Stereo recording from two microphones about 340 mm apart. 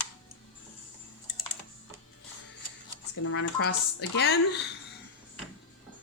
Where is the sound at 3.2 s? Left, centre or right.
Left.